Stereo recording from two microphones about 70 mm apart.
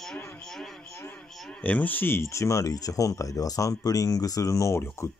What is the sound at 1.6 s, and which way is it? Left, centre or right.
Speech, left.